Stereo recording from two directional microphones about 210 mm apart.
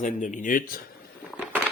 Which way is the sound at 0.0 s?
35° left (ahead or behind).